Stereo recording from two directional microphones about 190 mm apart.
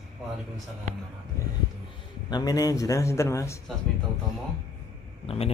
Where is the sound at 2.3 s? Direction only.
20° left (ahead or behind).